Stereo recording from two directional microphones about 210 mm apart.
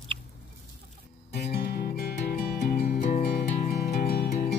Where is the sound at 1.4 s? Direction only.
50° left (ahead or behind).